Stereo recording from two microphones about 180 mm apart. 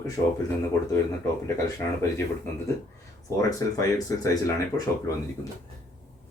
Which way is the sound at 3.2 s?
20° left (ahead or behind).